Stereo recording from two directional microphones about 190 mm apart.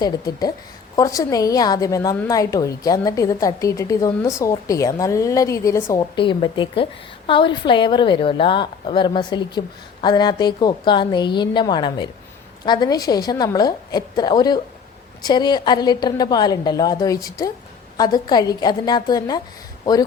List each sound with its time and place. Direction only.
0.0 s a woman's voice: 20° left (ahead or behind)